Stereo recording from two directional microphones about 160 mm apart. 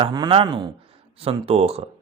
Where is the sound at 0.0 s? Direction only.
30° right (ahead or behind).